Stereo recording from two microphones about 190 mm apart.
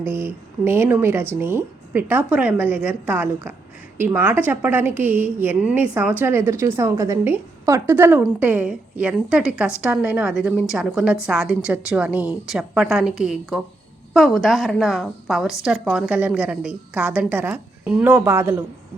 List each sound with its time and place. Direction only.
0.0 s a woman's voice: 10° right (ahead or behind)